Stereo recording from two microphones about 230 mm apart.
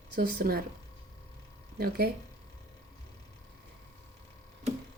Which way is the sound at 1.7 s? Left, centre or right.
Right.